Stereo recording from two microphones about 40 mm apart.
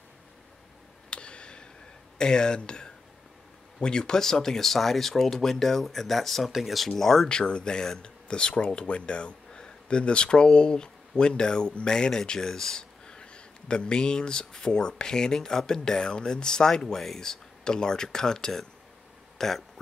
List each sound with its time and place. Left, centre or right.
1.1 s a sound: left
2.1 s speech: centre
7.0 s speech: centre
7.2 s speech: left
16.8 s speech: centre
19.3 s a sound: centre